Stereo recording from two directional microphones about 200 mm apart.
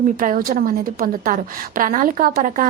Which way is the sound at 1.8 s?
45° right (ahead or behind).